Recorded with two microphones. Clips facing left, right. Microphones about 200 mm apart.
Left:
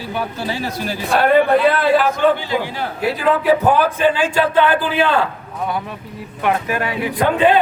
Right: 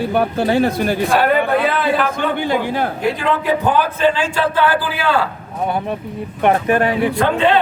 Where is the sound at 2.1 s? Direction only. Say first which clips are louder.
Left 2 dB; 55° right (ahead or behind).